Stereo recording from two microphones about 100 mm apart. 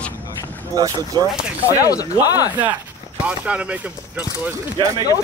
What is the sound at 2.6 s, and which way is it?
Speech, 15° right (ahead or behind).